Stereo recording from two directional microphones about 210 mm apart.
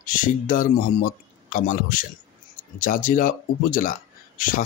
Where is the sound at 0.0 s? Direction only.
40° left (ahead or behind).